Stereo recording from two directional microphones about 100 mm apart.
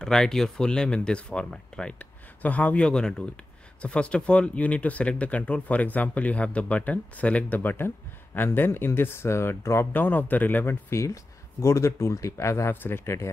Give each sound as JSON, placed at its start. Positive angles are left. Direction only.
{"t": 0.0, "sound": "speech", "side_deg": 5}